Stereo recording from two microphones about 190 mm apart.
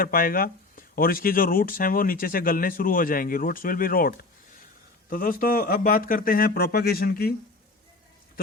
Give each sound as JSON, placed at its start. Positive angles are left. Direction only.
{"t": 0.0, "sound": "speech", "side_deg": 50}